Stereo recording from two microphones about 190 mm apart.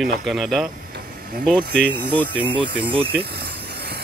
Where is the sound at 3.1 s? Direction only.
55° right (ahead or behind).